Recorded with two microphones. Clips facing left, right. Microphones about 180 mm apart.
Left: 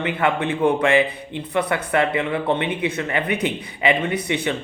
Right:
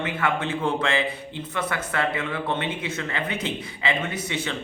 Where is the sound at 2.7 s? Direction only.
60° left (ahead or behind).